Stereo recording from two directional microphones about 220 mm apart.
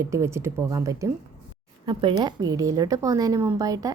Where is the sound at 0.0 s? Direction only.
10° right (ahead or behind).